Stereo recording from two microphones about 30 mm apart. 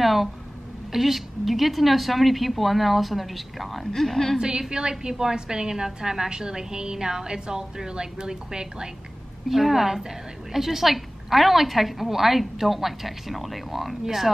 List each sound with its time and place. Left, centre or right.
0.0 s a woman's voice: centre
4.4 s a woman's voice: right
9.5 s a woman's voice: centre